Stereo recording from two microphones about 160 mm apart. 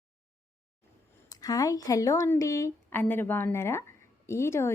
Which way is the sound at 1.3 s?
20° left (ahead or behind).